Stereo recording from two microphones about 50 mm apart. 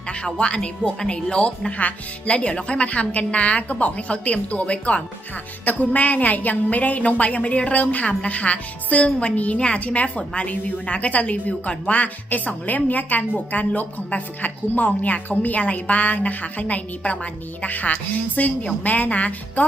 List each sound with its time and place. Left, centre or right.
0.1 s a woman's voice: centre